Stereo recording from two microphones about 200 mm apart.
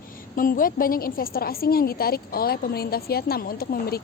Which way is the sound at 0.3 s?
45° left (ahead or behind).